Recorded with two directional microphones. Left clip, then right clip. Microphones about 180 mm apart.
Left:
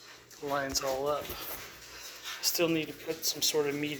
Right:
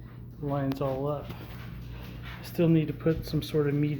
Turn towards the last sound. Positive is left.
turn(degrees=-5)  # may be behind; listen again after turning